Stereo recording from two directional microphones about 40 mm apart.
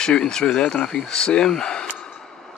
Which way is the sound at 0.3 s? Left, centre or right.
Centre.